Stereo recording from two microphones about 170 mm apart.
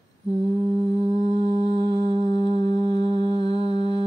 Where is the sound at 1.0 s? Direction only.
30° right (ahead or behind).